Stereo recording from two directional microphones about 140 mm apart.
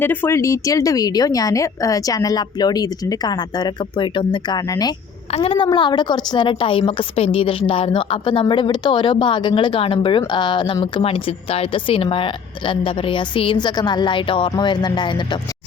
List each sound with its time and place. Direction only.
0.0 s a woman's voice: 15° left (ahead or behind)
5.3 s a woman's voice: 45° left (ahead or behind)
5.6 s a woman's voice: 30° left (ahead or behind)